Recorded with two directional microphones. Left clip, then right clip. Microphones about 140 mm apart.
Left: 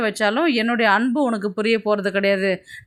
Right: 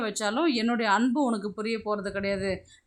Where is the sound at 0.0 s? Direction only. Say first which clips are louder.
Left 8 dB; 25° left (ahead or behind).